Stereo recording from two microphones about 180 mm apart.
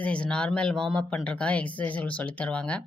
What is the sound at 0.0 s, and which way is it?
Speech, 5° left (ahead or behind).